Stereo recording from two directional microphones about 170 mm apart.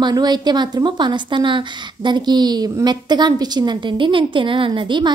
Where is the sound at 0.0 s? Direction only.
25° right (ahead or behind).